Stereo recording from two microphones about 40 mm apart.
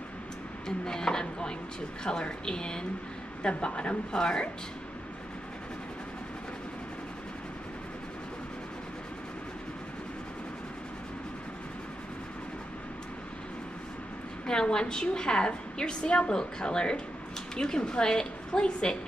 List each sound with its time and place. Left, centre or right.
0.7 s chopping: centre
2.0 s a woman's voice: left
14.4 s a woman's voice: centre